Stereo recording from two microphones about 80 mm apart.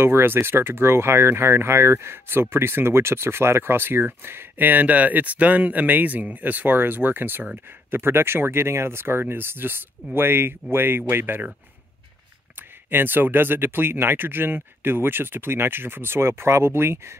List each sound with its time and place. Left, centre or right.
0.0 s speech: right
12.9 s speech: right